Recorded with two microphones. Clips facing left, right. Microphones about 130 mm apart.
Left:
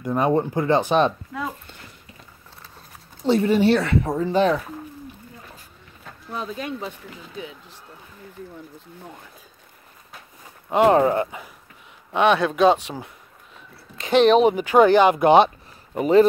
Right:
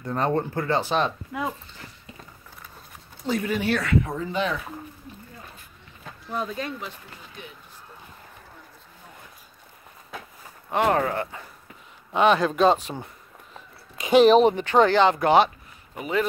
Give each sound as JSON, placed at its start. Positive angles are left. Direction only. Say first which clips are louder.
{"t": 0.0, "sound": "speech", "louder": "left 4 dB", "side_deg": 15}
{"t": 3.3, "sound": "speech", "louder": "left 8 dB", "side_deg": 30}
{"t": 10.7, "sound": "speech", "louder": "left 6 dB", "side_deg": 20}
{"t": 12.1, "sound": "speech", "louder": "left 1 dB", "side_deg": 0}
{"t": 15.9, "sound": "speech", "louder": "left 11 dB", "side_deg": 35}